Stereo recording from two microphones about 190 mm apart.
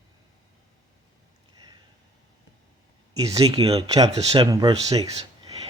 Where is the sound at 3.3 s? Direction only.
20° right (ahead or behind).